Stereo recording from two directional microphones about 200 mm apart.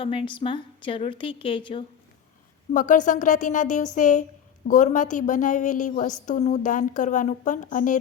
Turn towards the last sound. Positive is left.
turn(degrees=40)  # may be behind; listen again after turning